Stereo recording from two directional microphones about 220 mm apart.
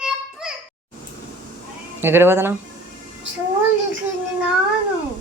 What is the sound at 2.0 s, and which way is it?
Speech, 10° right (ahead or behind).